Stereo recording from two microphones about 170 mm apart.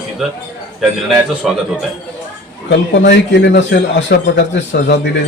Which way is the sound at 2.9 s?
85° left.